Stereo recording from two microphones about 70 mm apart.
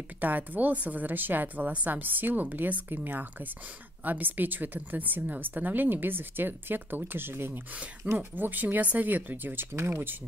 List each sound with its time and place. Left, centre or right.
0.2 s a woman's voice: right
7.7 s a woman's voice: centre; by 10.1 s right